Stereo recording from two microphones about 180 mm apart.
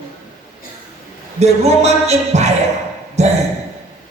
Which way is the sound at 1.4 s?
35° right (ahead or behind).